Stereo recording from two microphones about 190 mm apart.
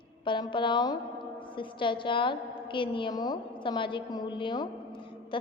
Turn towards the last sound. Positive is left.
turn(degrees=25)  # may be behind; listen again after turning